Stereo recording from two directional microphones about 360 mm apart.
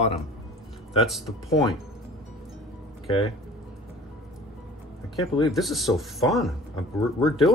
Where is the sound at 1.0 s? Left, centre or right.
Centre.